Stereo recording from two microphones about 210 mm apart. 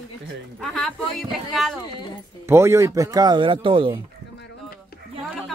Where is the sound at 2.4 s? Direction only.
15° right (ahead or behind).